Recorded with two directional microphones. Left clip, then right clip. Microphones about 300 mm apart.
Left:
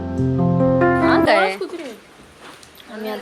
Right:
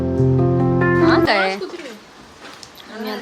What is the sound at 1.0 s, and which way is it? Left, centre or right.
Music, centre.